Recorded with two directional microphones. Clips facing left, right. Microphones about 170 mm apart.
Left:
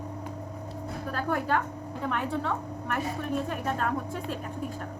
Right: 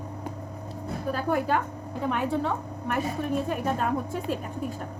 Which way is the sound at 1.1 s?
10° right (ahead or behind).